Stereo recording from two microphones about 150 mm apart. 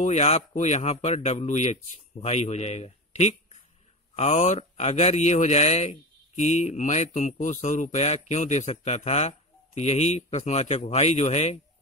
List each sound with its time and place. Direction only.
0.0 s speech: 45° left (ahead or behind)